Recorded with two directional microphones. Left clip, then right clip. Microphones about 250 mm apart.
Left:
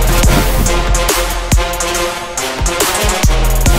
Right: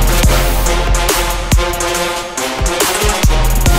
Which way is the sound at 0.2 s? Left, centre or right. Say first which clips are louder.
Left 1 dB; centre.